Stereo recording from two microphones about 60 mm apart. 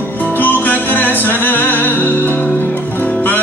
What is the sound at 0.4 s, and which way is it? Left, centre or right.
Music, left.